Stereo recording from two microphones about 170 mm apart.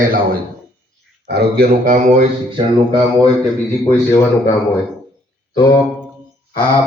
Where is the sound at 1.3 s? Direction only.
60° right (ahead or behind).